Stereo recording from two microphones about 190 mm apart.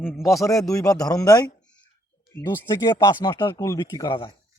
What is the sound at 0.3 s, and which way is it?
Speech, 15° left (ahead or behind).